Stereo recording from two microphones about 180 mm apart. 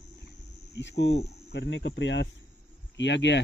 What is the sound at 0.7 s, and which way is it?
Speech, 75° left (ahead or behind).